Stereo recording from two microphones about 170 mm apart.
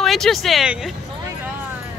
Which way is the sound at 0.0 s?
Centre (ahead or behind).